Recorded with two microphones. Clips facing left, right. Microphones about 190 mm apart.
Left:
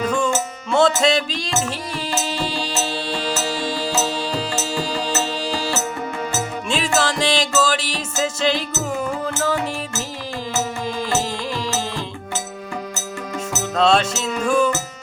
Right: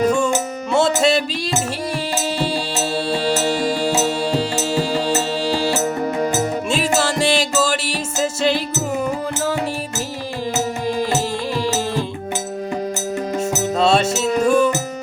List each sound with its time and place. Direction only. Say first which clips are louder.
0.2 s music: right 2 dB; 10° right (ahead or behind)
2.9 s music: right 5 dB; 45° right (ahead or behind)
6.7 s music: left 3 dB; 5° right (ahead or behind)
11.1 s music: right 2 dB; 15° right (ahead or behind)
13.7 s music: even; 5° right (ahead or behind)